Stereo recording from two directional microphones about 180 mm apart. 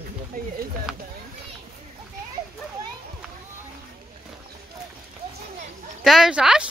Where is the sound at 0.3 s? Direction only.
50° right (ahead or behind).